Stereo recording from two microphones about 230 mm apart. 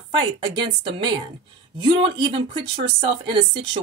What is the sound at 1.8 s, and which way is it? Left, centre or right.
A woman's voice, right.